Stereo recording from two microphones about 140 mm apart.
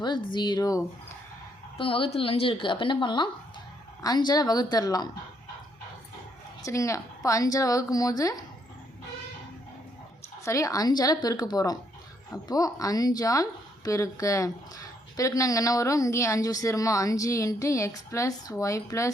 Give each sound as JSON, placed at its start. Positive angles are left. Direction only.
{"t": 0.0, "sound": "a woman's voice", "side_deg": 30}
{"t": 1.8, "sound": "a woman's voice", "side_deg": 40}
{"t": 6.6, "sound": "speech", "side_deg": 20}
{"t": 10.4, "sound": "speech", "side_deg": 20}